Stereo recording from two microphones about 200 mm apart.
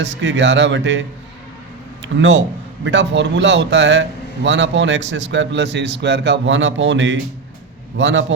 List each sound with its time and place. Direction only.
0.0 s speech: 65° right (ahead or behind)
2.1 s speech: 65° right (ahead or behind)